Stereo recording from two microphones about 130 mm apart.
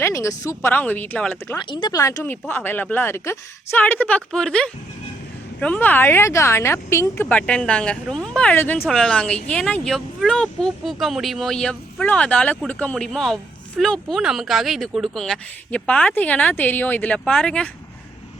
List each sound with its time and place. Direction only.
0.0 s speech: 25° left (ahead or behind)
0.7 s a woman's voice: 15° left (ahead or behind)
1.7 s speech: 35° left (ahead or behind)
2.0 s a woman's voice: 25° left (ahead or behind); by 17.7 s 5° left (ahead or behind)